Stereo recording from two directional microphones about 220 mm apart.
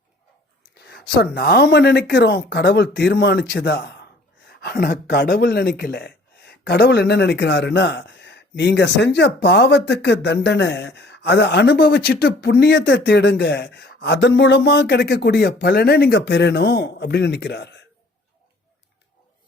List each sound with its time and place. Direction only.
0.8 s speech: 50° left (ahead or behind)